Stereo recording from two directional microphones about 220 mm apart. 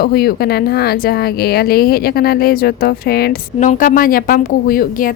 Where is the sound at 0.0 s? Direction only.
45° left (ahead or behind).